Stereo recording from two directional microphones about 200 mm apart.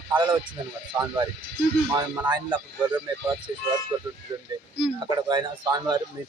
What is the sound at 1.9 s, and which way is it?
A woman's voice, 15° right (ahead or behind).